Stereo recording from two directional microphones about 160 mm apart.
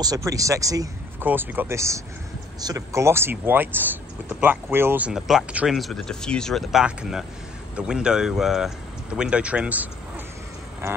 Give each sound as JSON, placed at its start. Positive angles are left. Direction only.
{"t": 0.0, "sound": "speech", "side_deg": -20}